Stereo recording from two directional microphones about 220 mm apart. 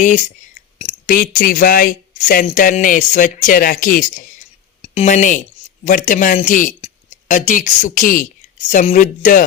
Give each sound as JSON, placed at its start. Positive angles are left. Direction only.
{"t": 0.0, "sound": "speech", "side_deg": 35}
{"t": 0.8, "sound": "a sound", "side_deg": 30}
{"t": 1.1, "sound": "speech", "side_deg": 40}